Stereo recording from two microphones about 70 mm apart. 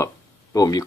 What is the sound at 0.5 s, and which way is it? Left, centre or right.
Speech, left.